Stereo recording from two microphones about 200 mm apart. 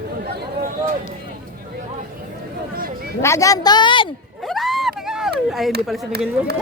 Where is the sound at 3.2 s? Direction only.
15° left (ahead or behind).